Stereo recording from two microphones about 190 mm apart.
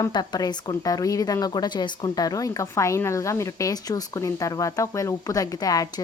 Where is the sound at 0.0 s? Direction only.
20° left (ahead or behind).